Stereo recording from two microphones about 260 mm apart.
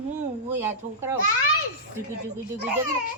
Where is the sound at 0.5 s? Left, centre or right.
Centre.